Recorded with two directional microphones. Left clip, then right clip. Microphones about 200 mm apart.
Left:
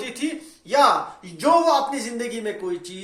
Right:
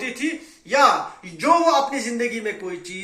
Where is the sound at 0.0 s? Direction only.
50° left (ahead or behind).